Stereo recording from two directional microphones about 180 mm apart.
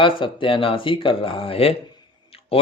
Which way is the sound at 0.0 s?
30° left (ahead or behind).